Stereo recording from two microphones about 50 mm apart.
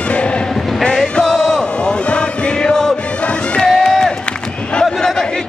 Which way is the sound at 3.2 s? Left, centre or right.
Left.